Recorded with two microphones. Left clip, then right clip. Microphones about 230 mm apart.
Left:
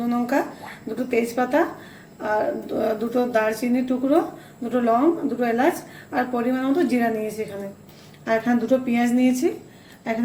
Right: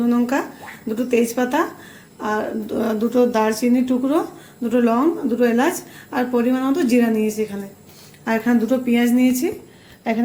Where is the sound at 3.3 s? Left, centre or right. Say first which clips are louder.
Right 2 dB; right.